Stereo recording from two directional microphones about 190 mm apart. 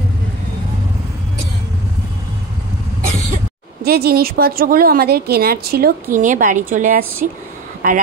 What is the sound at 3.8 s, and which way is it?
A woman's voice, 55° right (ahead or behind).